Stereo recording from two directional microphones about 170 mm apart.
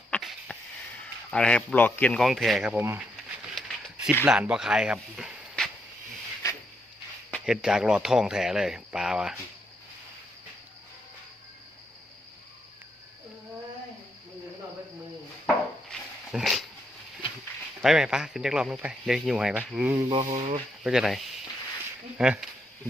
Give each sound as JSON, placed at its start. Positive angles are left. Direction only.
{"t": 0.1, "sound": "sniff", "side_deg": 5}
{"t": 1.0, "sound": "speech", "side_deg": 5}
{"t": 2.7, "sound": "speech", "side_deg": -15}
{"t": 3.5, "sound": "a sound", "side_deg": 0}
{"t": 4.2, "sound": "speech", "side_deg": -10}
{"t": 7.4, "sound": "speech", "side_deg": -5}
{"t": 15.9, "sound": "dog", "side_deg": 0}
{"t": 17.8, "sound": "speech", "side_deg": -5}
{"t": 20.0, "sound": "a sound", "side_deg": -25}
{"t": 20.8, "sound": "speech", "side_deg": 0}